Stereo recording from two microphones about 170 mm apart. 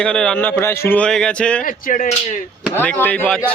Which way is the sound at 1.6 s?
55° left (ahead or behind).